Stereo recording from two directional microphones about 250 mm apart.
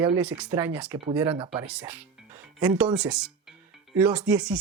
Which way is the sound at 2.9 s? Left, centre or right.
Centre.